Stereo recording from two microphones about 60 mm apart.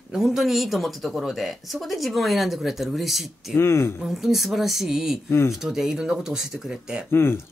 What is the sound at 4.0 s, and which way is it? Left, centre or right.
Speech, centre.